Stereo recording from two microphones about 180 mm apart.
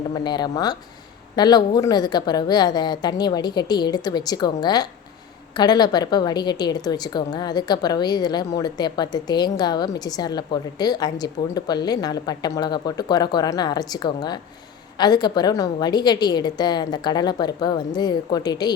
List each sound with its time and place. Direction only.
0.1 s a woman's voice: 25° left (ahead or behind)